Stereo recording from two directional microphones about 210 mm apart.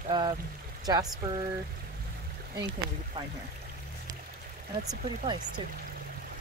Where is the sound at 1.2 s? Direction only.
15° right (ahead or behind).